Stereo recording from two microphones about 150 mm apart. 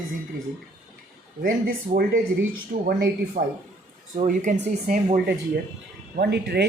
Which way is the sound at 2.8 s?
90° right.